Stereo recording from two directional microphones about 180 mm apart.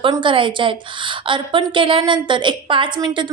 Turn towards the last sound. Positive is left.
turn(degrees=-25)  # may be behind; listen again after turning